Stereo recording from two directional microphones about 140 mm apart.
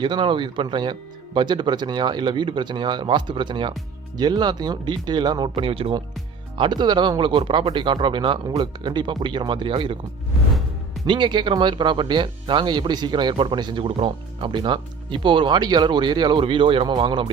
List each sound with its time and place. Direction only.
0.0 s speech: 35° right (ahead or behind)
11.0 s speech: 35° right (ahead or behind)